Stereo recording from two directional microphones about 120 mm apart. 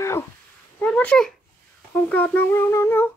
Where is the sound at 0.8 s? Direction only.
10° left (ahead or behind).